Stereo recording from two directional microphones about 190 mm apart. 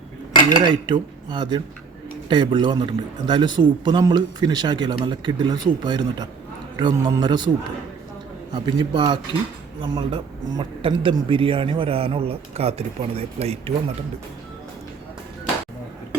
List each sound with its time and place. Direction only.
0.5 s a man's voice: 25° right (ahead or behind)
8.5 s a man's voice: 25° right (ahead or behind)